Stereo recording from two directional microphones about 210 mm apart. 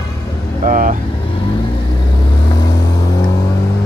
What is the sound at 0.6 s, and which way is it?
Speech, 40° right (ahead or behind).